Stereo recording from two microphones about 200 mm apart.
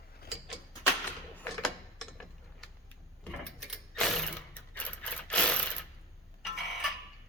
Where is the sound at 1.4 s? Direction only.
5° left (ahead or behind).